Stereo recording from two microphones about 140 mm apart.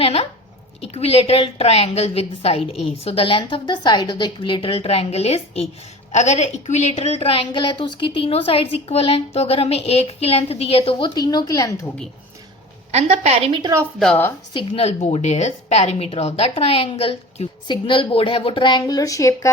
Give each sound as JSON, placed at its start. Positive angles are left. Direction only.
{"t": 0.0, "sound": "a woman's voice", "side_deg": 45}
{"t": 12.9, "sound": "a woman's voice", "side_deg": -50}
{"t": 13.6, "sound": "a woman's voice", "side_deg": -25}
{"t": 14.0, "sound": "speech", "side_deg": 10}
{"t": 14.5, "sound": "a woman's voice", "side_deg": 50}